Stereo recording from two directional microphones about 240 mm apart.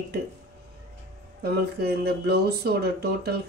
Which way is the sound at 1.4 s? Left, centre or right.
Right.